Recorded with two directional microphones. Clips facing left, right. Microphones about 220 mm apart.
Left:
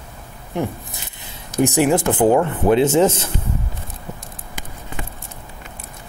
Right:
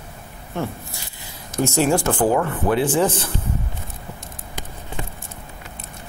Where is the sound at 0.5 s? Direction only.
20° left (ahead or behind).